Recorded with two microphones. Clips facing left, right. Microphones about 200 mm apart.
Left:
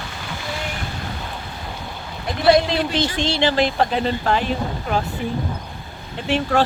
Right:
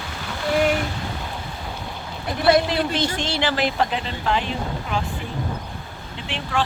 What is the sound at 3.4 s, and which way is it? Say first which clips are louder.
Speech: left 5 dB; 25° left (ahead or behind).